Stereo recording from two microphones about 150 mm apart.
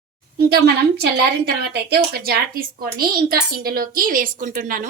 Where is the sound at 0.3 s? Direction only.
90° right.